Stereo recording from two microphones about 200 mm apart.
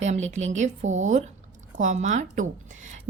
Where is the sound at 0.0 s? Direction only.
35° right (ahead or behind).